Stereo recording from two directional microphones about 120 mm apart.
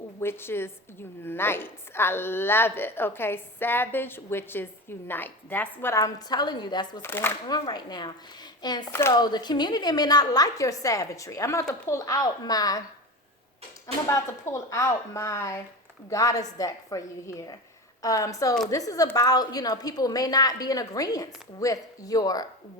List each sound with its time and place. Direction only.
0.2 s a woman's voice: 20° left (ahead or behind); by 7.0 s 35° left (ahead or behind)
7.0 s a woman's voice: 20° left (ahead or behind)
7.4 s a woman's voice: 35° left (ahead or behind)
8.9 s a woman's voice: 20° left (ahead or behind)
9.1 s a woman's voice: 35° left (ahead or behind)
13.8 s a woman's voice: 25° left (ahead or behind)